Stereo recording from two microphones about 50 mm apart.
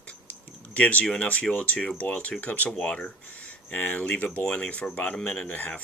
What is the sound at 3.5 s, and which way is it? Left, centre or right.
Speech, left.